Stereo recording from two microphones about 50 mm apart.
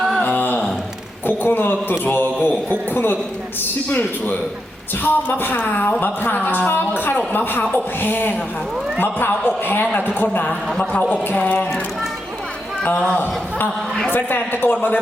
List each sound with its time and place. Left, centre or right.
0.2 s a sound: left
1.3 s a man's voice: left
11.1 s speech: left
14.1 s a man's voice: left